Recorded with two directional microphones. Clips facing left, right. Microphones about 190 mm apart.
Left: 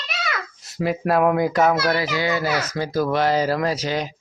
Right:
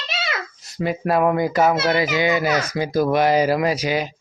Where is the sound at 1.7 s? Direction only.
25° right (ahead or behind).